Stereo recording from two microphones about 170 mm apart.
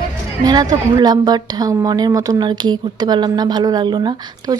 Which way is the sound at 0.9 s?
25° right (ahead or behind).